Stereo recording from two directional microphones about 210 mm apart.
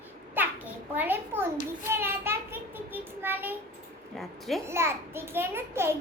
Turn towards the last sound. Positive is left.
turn(degrees=-10)  # may be behind; listen again after turning